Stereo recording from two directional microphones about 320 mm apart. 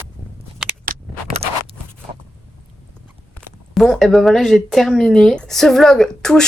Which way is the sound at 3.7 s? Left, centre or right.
Centre.